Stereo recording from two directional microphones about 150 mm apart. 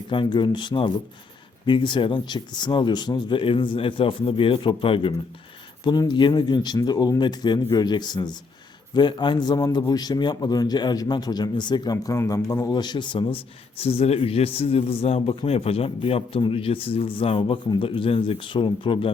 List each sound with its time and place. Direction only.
0.1 s a man's voice: 30° left (ahead or behind)